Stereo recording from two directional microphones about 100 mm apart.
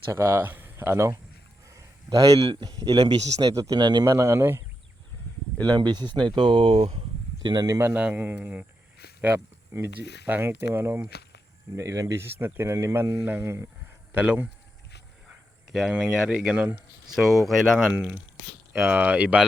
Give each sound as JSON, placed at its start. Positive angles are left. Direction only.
{"t": 0.1, "sound": "speech", "side_deg": -25}
{"t": 1.6, "sound": "a sound", "side_deg": -35}
{"t": 2.5, "sound": "a man's voice", "side_deg": -55}
{"t": 2.7, "sound": "a man's voice", "side_deg": -40}
{"t": 4.0, "sound": "speech", "side_deg": -30}
{"t": 5.6, "sound": "speech", "side_deg": -45}
{"t": 7.4, "sound": "speech", "side_deg": -40}
{"t": 7.8, "sound": "speech", "side_deg": -20}
{"t": 11.8, "sound": "speech", "side_deg": -35}
{"t": 14.1, "sound": "speech", "side_deg": -15}
{"t": 15.7, "sound": "speech", "side_deg": -5}
{"t": 17.9, "sound": "speech", "side_deg": -15}